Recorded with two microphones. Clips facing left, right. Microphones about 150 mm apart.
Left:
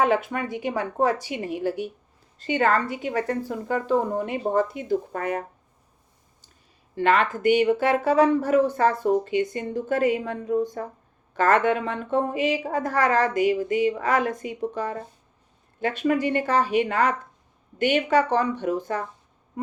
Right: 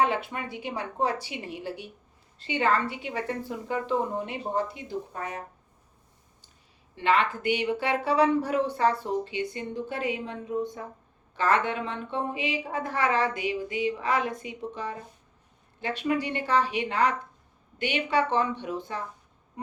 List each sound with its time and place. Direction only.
0.0 s speech: 50° left (ahead or behind)
6.9 s speech: 45° left (ahead or behind)